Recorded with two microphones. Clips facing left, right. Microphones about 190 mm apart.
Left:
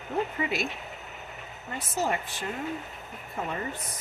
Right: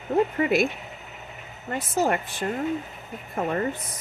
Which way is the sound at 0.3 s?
50° right (ahead or behind).